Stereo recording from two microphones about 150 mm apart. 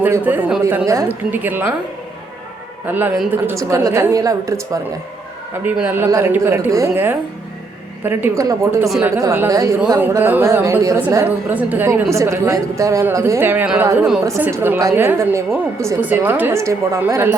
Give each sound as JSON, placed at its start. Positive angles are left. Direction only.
{"t": 0.0, "sound": "a woman's voice", "side_deg": -10}
{"t": 2.8, "sound": "a woman's voice", "side_deg": -10}
{"t": 5.6, "sound": "a woman's voice", "side_deg": -10}